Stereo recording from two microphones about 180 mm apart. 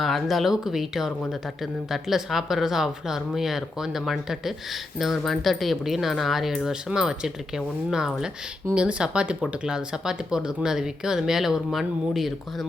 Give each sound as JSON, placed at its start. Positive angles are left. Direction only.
{"t": 0.0, "sound": "speech", "side_deg": 0}